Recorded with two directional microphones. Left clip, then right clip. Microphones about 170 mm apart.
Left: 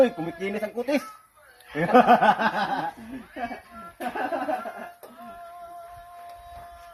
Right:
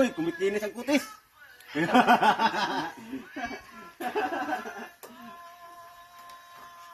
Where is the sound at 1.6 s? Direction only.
20° left (ahead or behind).